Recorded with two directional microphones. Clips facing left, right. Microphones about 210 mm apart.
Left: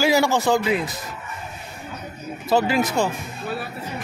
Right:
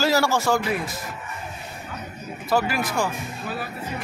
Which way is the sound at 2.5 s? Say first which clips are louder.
Left 4 dB; 20° left (ahead or behind).